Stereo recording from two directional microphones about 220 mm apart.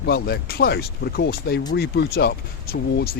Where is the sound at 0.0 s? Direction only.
45° left (ahead or behind).